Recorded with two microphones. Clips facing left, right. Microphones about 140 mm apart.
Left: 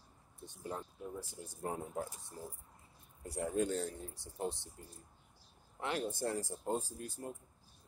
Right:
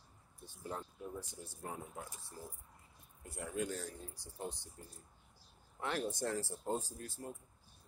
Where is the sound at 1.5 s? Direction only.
30° left (ahead or behind).